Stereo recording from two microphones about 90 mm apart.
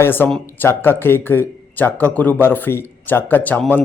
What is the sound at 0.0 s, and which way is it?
A man's voice, 25° left (ahead or behind).